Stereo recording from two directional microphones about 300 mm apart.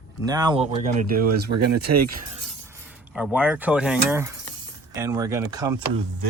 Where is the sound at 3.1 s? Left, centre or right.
Centre.